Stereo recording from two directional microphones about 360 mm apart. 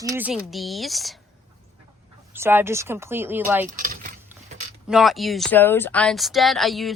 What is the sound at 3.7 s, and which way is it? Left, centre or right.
Keys jangling, right.